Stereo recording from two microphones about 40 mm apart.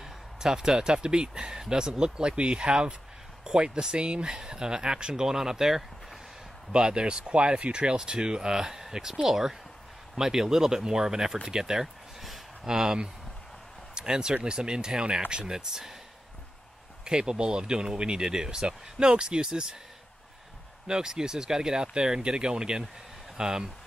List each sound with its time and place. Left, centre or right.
0.0 s speech: centre
6.7 s speech: right
17.0 s speech: centre
20.8 s speech: centre